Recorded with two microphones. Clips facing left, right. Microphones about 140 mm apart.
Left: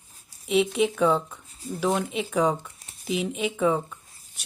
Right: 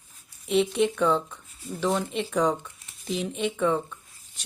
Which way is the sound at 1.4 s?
35° left (ahead or behind).